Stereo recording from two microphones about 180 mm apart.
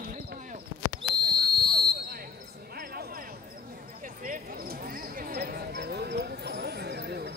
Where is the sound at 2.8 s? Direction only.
55° right (ahead or behind).